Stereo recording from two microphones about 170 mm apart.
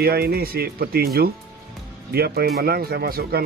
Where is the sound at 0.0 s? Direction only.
65° right (ahead or behind).